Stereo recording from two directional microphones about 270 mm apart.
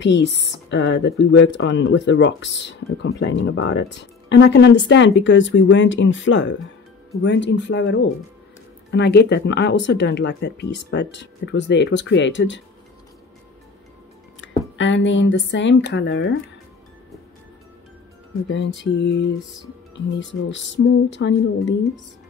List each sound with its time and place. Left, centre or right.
0.0 s speech: left
14.4 s music: left
14.8 s speech: left
18.5 s speech: left